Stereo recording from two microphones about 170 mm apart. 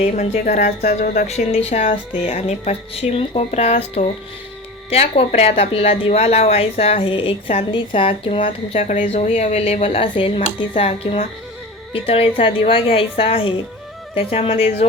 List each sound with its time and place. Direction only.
0.0 s a woman's voice: 45° left (ahead or behind)